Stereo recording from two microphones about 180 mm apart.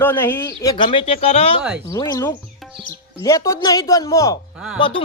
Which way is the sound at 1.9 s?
20° left (ahead or behind).